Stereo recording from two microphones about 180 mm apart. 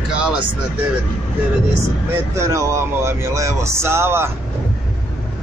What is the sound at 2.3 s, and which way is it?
Speech, 15° right (ahead or behind).